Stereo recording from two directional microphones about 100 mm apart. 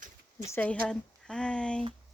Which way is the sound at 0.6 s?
10° left (ahead or behind).